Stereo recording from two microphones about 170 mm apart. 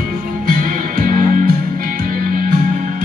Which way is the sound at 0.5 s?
55° right (ahead or behind).